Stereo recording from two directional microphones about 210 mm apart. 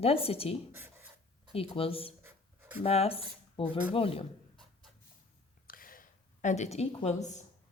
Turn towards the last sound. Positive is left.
turn(degrees=35)  # may be behind; listen again after turning